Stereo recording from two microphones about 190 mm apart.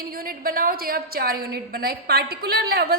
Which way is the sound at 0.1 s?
50° right (ahead or behind).